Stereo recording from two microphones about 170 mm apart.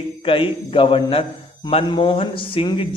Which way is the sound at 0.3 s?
30° left (ahead or behind).